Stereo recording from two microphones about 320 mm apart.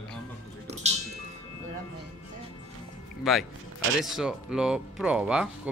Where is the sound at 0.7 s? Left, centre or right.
Centre.